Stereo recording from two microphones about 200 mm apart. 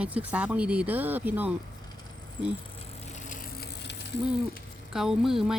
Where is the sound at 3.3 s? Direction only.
40° left (ahead or behind).